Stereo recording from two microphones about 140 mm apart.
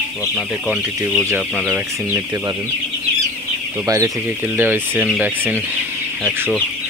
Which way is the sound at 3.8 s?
20° right (ahead or behind).